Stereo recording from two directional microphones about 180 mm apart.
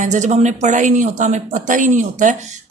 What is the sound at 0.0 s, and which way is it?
Speech, 40° right (ahead or behind).